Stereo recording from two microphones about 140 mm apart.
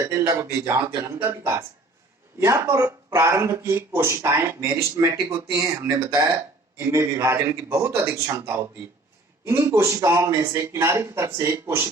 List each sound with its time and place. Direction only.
0.0 s speech: 20° right (ahead or behind)